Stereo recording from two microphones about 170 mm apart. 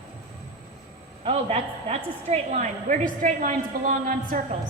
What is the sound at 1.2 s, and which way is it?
A woman's voice, 40° right (ahead or behind).